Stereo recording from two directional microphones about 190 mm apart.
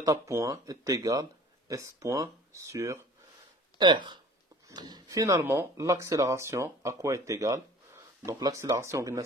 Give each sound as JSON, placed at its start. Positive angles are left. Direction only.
{"t": 0.0, "sound": "speech", "side_deg": -15}